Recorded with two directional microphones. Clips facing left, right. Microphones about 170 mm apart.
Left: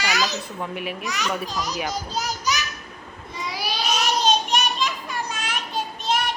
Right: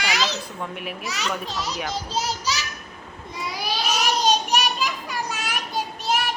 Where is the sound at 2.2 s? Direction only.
30° right (ahead or behind).